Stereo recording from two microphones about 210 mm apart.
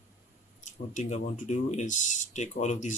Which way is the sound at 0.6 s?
35° left (ahead or behind).